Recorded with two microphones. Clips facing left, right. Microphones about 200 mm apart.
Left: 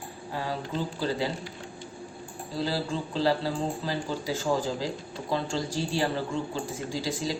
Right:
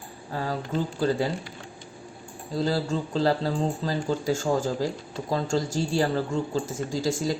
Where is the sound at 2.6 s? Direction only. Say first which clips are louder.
Right 4 dB; 45° right (ahead or behind).